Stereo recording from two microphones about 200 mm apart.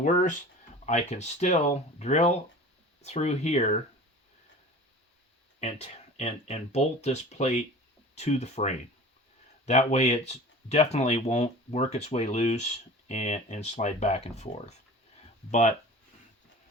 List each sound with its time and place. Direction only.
0.0 s speech: 40° left (ahead or behind)
5.5 s speech: 35° left (ahead or behind)